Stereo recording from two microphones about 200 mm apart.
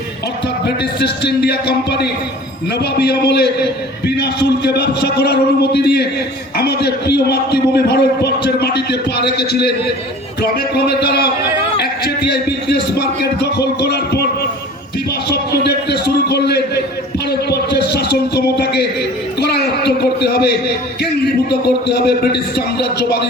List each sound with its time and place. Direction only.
0.6 s a man's voice: 55° left (ahead or behind)
15.3 s a sound: 55° left (ahead or behind)
21.5 s a man's voice: 55° left (ahead or behind)